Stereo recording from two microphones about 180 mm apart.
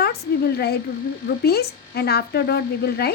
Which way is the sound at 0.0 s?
60° left (ahead or behind).